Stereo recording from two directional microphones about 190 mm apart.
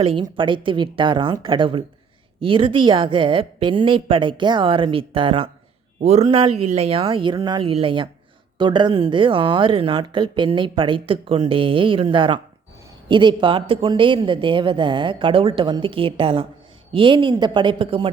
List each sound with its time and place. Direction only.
0.0 s speech: 30° right (ahead or behind)